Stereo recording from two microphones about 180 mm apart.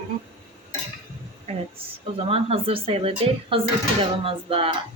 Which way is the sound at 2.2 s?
30° right (ahead or behind).